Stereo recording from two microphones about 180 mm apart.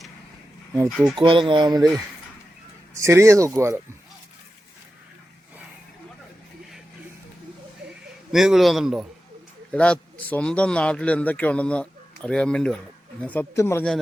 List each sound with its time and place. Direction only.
0.9 s a man's voice: centre (ahead or behind)
1.1 s speech: 30° right (ahead or behind)
2.9 s speech: 15° right (ahead or behind)
8.3 s a man's voice: centre (ahead or behind)